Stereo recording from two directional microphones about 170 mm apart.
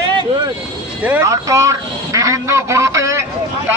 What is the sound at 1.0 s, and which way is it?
A man's voice, 15° right (ahead or behind).